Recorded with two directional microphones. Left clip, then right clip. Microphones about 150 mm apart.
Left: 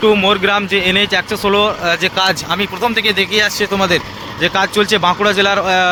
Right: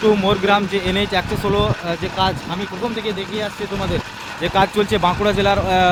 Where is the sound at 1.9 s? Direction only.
10° left (ahead or behind).